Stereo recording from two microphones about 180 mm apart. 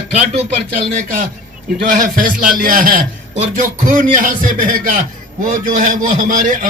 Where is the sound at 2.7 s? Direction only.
50° right (ahead or behind).